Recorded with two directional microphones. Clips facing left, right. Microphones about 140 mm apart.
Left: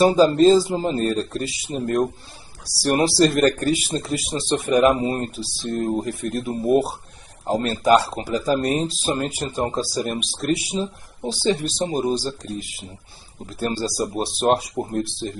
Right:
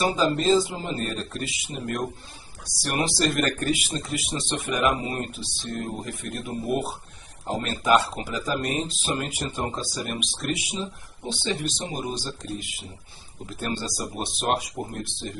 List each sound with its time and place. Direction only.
0.0 s a man's voice: 35° left (ahead or behind)